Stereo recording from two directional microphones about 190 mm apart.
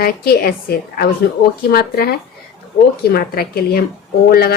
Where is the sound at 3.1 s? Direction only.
50° left (ahead or behind).